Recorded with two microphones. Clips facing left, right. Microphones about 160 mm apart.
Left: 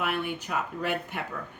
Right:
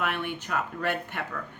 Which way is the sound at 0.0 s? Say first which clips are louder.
Left 1 dB; 10° left (ahead or behind).